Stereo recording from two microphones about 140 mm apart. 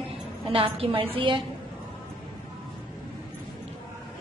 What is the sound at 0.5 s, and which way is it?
Speech, 40° right (ahead or behind).